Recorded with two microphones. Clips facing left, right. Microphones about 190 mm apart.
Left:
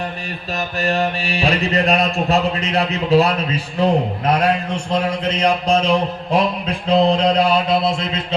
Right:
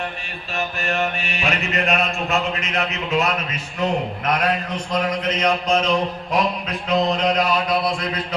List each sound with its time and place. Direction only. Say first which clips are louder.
0.5 s mantra: left 4 dB; 35° left (ahead or behind)